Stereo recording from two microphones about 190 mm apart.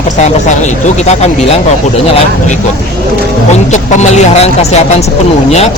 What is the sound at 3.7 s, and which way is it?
Speech, 35° left (ahead or behind).